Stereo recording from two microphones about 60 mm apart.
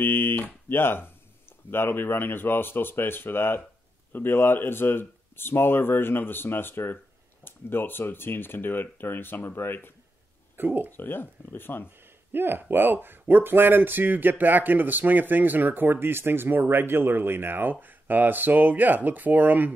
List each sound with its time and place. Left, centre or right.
0.0 s speech: left
10.6 s speech: right
10.9 s speech: left
12.3 s speech: right